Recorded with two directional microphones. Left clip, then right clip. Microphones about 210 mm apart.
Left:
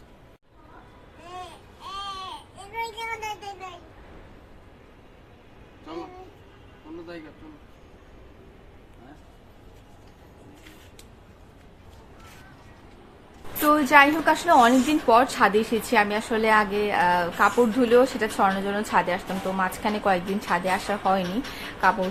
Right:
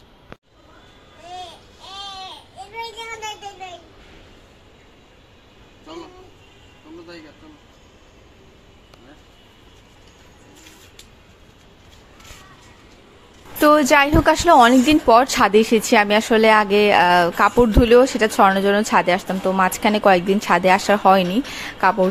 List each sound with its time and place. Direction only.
13.7 s a woman's voice: 40° right (ahead or behind)